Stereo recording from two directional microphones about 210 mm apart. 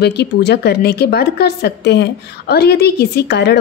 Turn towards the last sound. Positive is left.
turn(degrees=55)  # may be behind; listen again after turning